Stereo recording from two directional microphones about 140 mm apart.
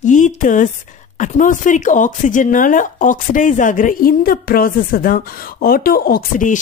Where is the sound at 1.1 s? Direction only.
65° left (ahead or behind).